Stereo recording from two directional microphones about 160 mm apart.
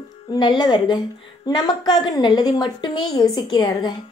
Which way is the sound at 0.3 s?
30° left (ahead or behind).